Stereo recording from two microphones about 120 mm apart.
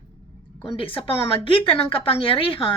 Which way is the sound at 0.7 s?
50° left (ahead or behind).